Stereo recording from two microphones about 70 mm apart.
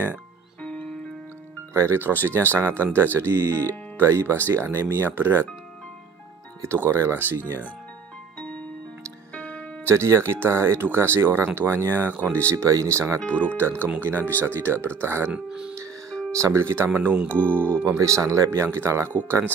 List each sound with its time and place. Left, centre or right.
0.6 s music: centre
1.7 s speech: right
6.6 s speech: right
9.3 s music: centre
9.8 s speech: right
13.2 s speech: left
13.8 s speech: right
14.1 s speech: left
14.4 s speech: right
15.3 s speech: centre
16.1 s music: centre
16.3 s speech: right
16.9 s speech: right
17.8 s speech: right